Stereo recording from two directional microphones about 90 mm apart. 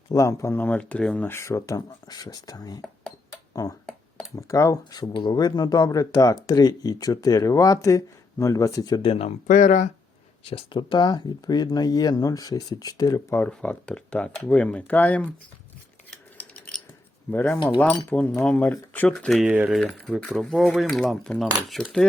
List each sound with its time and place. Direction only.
0.1 s speech: 35° left (ahead or behind); by 1.3 s 15° left (ahead or behind)
1.3 s speech: 30° left (ahead or behind)
5.1 s speech: 55° left (ahead or behind)
9.0 s speech: 90° left
10.4 s speech: 80° left; by 13.2 s 45° left (ahead or behind)
13.5 s speech: 10° left (ahead or behind)
17.3 s speech: 20° left (ahead or behind)
19.1 s speech: centre (ahead or behind)
19.5 s speech: 15° right (ahead or behind)
19.8 s speech: 5° left (ahead or behind)